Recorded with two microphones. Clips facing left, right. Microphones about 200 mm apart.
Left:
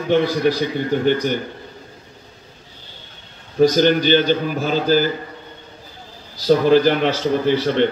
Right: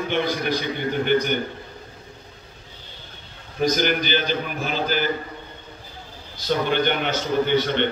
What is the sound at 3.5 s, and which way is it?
A man's voice, 35° left (ahead or behind).